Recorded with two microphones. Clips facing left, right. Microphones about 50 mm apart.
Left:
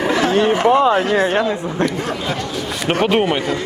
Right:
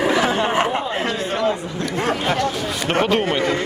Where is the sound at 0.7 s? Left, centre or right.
Left.